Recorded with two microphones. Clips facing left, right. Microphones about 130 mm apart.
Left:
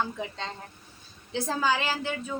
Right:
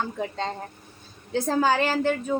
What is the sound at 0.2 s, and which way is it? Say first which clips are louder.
A woman's voice: right 6 dB; 45° right (ahead or behind).